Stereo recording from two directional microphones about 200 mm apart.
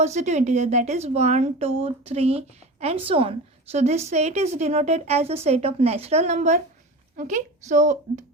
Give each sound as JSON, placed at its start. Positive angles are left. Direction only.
{"t": 0.0, "sound": "a woman's voice", "side_deg": -35}